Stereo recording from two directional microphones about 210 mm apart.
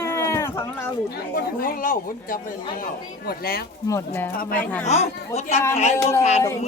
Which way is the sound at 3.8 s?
15° left (ahead or behind).